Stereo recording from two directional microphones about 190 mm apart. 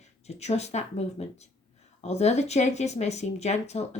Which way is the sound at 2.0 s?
35° left (ahead or behind).